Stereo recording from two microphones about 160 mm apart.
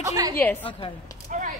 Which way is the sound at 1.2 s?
55° right (ahead or behind).